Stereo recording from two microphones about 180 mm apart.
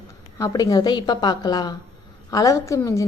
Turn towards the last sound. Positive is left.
turn(degrees=15)  # may be behind; listen again after turning